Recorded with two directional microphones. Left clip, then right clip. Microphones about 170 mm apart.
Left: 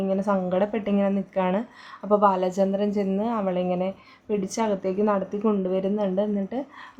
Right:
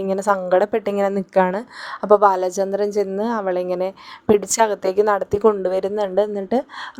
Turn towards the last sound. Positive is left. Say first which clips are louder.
# right 8 dB
turn(degrees=-45)  # may be behind; listen again after turning